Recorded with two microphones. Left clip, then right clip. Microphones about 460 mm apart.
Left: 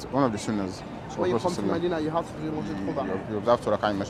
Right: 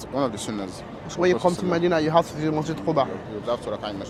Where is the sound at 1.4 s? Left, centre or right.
Right.